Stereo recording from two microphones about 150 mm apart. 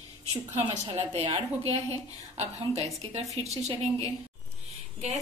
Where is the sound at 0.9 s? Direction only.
40° right (ahead or behind).